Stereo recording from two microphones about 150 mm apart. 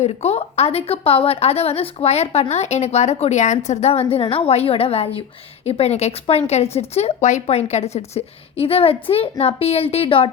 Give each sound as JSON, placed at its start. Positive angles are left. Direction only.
{"t": 0.0, "sound": "a woman's voice", "side_deg": 45}